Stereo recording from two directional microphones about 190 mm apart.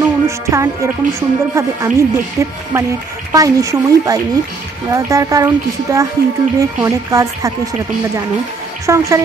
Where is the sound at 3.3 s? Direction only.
20° right (ahead or behind).